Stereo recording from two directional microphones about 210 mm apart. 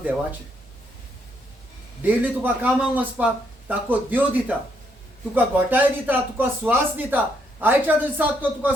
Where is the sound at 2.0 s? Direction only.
10° right (ahead or behind).